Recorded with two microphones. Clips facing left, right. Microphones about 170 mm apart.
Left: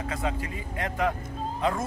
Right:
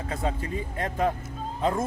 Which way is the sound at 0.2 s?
25° right (ahead or behind).